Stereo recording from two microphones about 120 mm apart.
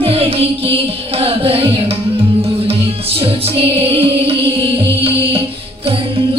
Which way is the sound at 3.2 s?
50° right (ahead or behind).